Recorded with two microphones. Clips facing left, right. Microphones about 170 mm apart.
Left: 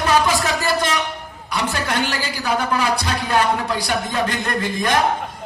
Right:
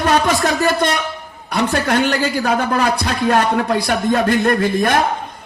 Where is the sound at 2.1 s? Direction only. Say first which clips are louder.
Right 6 dB; 60° right (ahead or behind).